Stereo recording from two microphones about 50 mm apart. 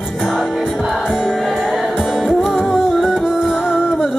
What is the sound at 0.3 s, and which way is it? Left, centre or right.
Music, centre.